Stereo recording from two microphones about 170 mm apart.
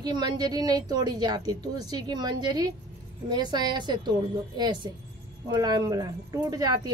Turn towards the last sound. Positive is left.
turn(degrees=-25)  # may be behind; listen again after turning